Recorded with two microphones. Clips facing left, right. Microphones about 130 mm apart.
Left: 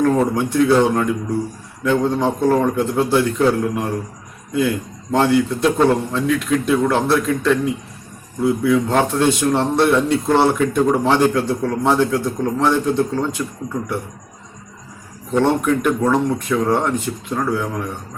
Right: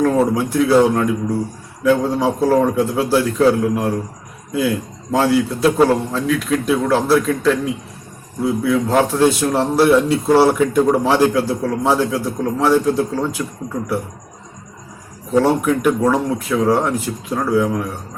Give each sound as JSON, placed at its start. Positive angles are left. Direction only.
{"t": 0.2, "sound": "a man's voice", "side_deg": -5}
{"t": 5.1, "sound": "a man's voice", "side_deg": -5}
{"t": 15.3, "sound": "a man's voice", "side_deg": -5}